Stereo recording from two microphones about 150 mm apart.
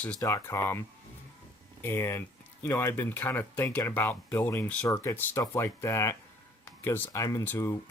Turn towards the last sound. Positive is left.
turn(degrees=15)  # may be behind; listen again after turning